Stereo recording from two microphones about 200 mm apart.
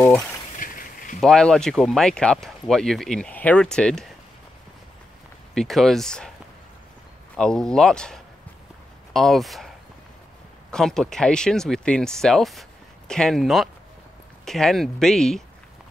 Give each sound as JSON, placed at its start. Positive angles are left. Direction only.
{"t": 0.0, "sound": "speech", "side_deg": 0}
{"t": 0.6, "sound": "a sound", "side_deg": 40}
{"t": 1.2, "sound": "speech", "side_deg": 5}
{"t": 5.5, "sound": "speech", "side_deg": 0}
{"t": 7.3, "sound": "speech", "side_deg": 5}
{"t": 10.7, "sound": "speech", "side_deg": 5}